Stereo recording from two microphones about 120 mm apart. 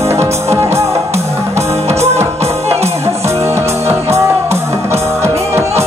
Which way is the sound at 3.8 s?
25° right (ahead or behind).